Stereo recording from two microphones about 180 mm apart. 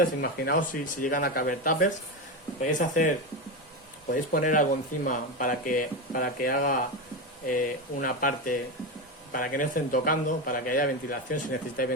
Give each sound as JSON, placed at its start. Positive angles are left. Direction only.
{"t": 0.0, "sound": "speech", "side_deg": 55}